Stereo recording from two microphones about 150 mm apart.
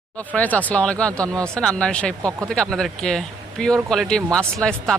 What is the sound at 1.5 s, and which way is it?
Speech, 5° left (ahead or behind).